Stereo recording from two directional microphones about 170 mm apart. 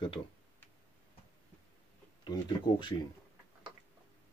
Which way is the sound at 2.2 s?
25° left (ahead or behind).